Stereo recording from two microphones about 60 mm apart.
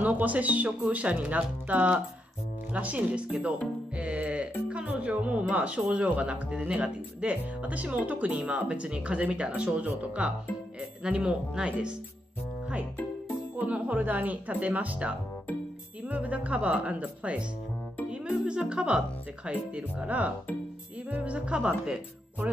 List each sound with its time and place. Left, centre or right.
0.0 s speech: right
11.1 s speech: centre
13.6 s speech: right